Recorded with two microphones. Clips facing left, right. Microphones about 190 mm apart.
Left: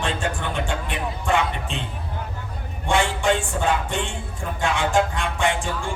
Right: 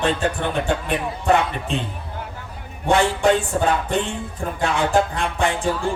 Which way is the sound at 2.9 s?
40° right (ahead or behind).